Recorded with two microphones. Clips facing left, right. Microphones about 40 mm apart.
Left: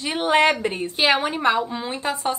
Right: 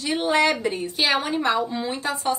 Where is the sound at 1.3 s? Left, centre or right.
Left.